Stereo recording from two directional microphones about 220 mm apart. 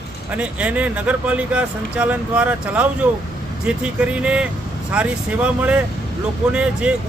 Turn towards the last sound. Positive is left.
turn(degrees=-5)  # may be behind; listen again after turning